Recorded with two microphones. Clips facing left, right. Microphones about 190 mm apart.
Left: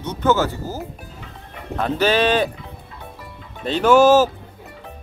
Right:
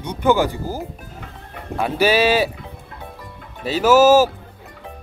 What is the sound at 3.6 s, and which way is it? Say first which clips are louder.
Speech: even; 5° right (ahead or behind).